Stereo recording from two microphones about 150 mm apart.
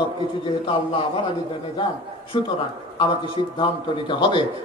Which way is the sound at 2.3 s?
35° left (ahead or behind).